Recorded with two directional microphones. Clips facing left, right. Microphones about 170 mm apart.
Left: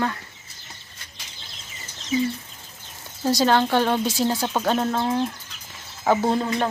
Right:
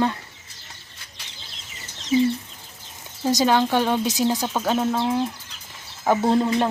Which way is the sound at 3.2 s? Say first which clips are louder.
Even; 15° right (ahead or behind).